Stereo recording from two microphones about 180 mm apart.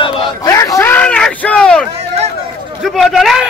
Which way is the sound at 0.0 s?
30° left (ahead or behind).